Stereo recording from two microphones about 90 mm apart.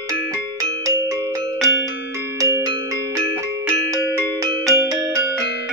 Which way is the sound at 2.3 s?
35° right (ahead or behind).